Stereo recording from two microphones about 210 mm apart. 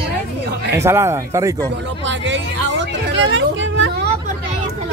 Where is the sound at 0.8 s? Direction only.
15° right (ahead or behind).